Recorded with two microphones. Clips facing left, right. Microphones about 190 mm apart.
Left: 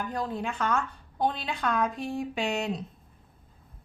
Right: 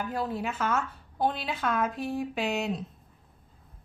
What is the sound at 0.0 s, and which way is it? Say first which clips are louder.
A woman's voice: even; 5° right (ahead or behind).